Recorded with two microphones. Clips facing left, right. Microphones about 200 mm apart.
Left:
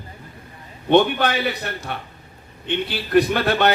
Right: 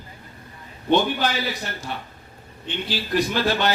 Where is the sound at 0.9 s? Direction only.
60° left (ahead or behind).